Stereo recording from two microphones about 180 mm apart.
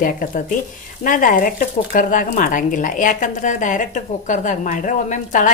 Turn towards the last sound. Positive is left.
turn(degrees=45)  # may be behind; listen again after turning